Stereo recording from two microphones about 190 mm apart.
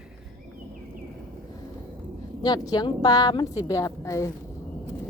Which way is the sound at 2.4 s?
20° left (ahead or behind).